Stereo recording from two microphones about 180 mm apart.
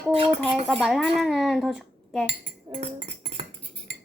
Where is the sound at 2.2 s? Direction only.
30° right (ahead or behind).